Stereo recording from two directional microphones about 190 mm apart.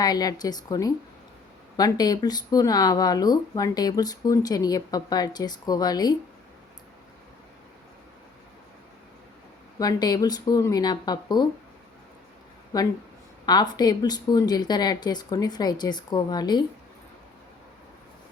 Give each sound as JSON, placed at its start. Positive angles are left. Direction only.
{"t": 0.0, "sound": "speech", "side_deg": 20}
{"t": 9.7, "sound": "speech", "side_deg": 20}
{"t": 12.7, "sound": "speech", "side_deg": 20}